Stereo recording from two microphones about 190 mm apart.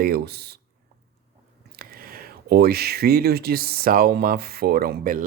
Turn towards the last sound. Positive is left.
turn(degrees=-50)  # may be behind; listen again after turning